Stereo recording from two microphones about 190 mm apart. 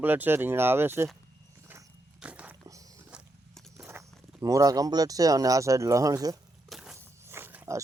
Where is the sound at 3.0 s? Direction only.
5° right (ahead or behind).